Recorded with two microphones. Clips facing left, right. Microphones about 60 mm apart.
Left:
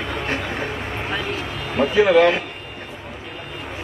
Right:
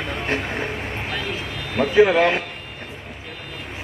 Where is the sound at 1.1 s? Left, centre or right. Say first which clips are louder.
Left 2 dB; left.